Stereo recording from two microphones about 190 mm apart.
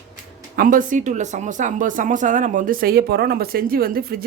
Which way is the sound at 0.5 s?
45° right (ahead or behind).